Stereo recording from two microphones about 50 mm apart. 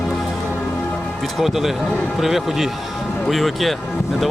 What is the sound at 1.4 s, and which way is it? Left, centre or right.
Speech, centre.